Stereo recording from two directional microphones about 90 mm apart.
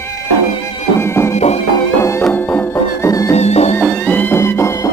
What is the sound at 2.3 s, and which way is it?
Music, 20° left (ahead or behind).